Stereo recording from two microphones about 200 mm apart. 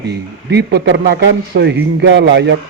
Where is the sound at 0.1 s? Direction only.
55° right (ahead or behind).